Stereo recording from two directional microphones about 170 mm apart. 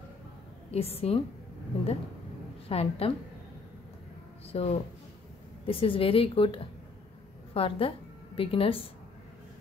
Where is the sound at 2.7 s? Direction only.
35° left (ahead or behind).